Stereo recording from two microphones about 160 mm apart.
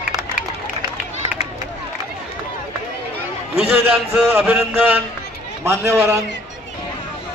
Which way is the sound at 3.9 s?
15° right (ahead or behind).